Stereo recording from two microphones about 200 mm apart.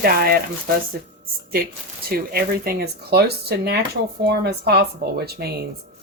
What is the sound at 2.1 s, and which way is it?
Speech, 50° right (ahead or behind).